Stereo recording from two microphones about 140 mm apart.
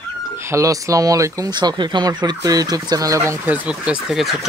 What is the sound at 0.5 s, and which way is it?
Speech, 20° right (ahead or behind).